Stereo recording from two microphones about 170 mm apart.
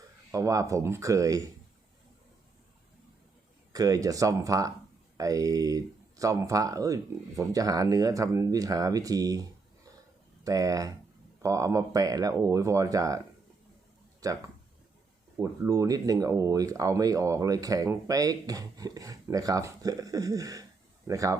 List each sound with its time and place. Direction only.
0.3 s speech: 20° right (ahead or behind)
3.7 s speech: 20° right (ahead or behind)